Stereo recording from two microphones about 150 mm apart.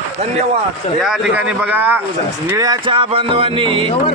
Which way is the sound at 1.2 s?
10° right (ahead or behind).